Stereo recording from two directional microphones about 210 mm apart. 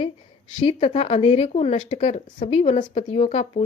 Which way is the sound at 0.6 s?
30° left (ahead or behind).